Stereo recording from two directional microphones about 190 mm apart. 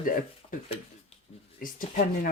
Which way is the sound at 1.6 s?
45° left (ahead or behind).